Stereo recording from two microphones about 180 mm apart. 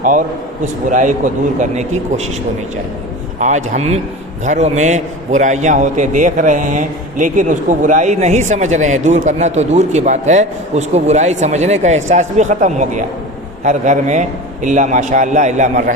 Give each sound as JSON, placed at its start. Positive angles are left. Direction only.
{"t": 0.0, "sound": "a man's voice", "side_deg": -45}
{"t": 3.4, "sound": "a man's voice", "side_deg": -40}